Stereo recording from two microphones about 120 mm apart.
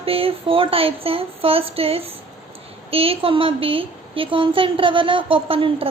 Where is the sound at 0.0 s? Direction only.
50° right (ahead or behind).